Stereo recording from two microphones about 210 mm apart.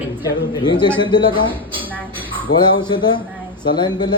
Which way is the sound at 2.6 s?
20° left (ahead or behind).